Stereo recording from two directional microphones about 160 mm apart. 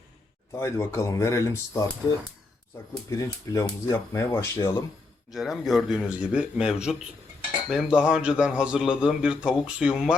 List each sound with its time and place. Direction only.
0.5 s speech: 15° left (ahead or behind)
3.1 s speech: 20° left (ahead or behind)
5.3 s a man's voice: centre (ahead or behind)